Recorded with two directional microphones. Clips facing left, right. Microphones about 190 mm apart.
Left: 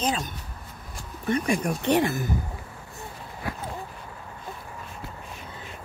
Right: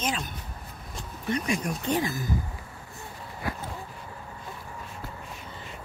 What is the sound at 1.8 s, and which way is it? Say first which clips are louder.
Speech: left 6 dB; 70° left (ahead or behind).